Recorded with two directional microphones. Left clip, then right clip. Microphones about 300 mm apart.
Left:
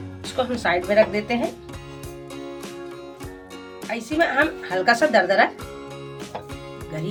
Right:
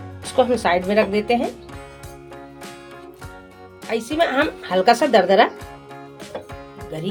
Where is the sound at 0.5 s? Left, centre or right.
Right.